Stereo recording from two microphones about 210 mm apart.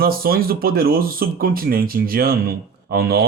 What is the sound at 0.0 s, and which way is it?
Speech, 45° right (ahead or behind).